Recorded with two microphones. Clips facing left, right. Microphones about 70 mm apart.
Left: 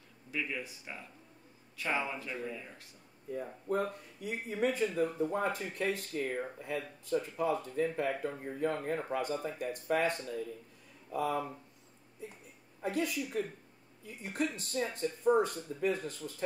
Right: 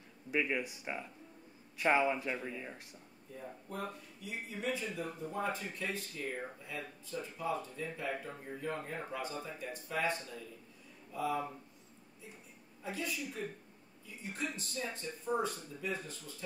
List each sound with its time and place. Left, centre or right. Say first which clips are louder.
0.3 s speech: right 4 dB; right
3.3 s speech: left 9 dB; left
12.8 s speech: left 6 dB; left